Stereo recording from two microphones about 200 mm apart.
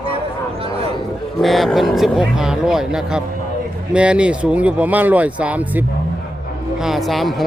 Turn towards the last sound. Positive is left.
turn(degrees=0)  # may be behind; listen again after turning